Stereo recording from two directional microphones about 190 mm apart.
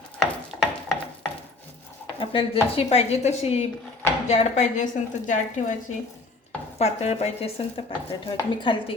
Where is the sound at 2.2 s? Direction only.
25° left (ahead or behind).